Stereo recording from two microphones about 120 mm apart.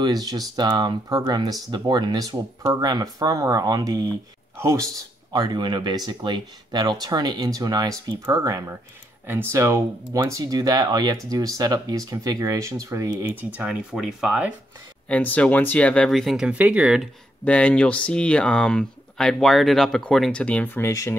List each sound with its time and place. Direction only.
0.0 s speech: 35° right (ahead or behind)
5.3 s speech: 35° right (ahead or behind); by 14.5 s 5° right (ahead or behind)
15.0 s speech: 10° left (ahead or behind); by 17.1 s 5° right (ahead or behind)
17.5 s speech: 10° left (ahead or behind)
20.9 s speech: 25° left (ahead or behind)